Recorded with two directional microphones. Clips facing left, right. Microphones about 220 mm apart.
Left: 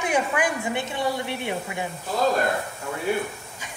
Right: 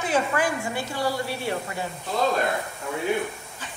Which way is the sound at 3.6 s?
10° left (ahead or behind).